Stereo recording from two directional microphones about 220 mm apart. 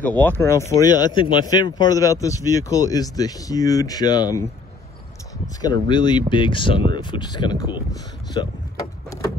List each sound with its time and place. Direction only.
0.2 s speech: 10° left (ahead or behind)
5.6 s speech: 20° left (ahead or behind)